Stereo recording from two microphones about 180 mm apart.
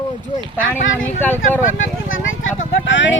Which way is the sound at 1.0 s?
10° left (ahead or behind).